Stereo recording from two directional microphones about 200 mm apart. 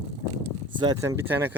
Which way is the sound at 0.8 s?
15° right (ahead or behind).